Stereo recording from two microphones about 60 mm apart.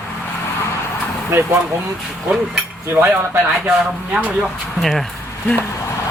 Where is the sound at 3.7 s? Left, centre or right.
Right.